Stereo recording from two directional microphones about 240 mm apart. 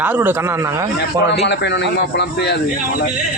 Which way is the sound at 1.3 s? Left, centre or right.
Left.